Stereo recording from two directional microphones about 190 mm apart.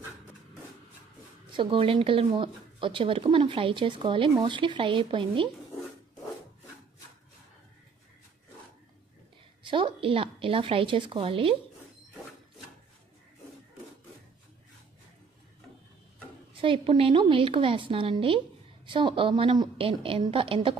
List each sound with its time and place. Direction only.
1.6 s speech: 30° right (ahead or behind)
9.7 s speech: 25° right (ahead or behind)
16.5 s speech: 25° right (ahead or behind)